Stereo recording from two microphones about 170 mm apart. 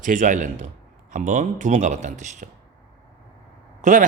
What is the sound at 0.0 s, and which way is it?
Speech, 50° right (ahead or behind).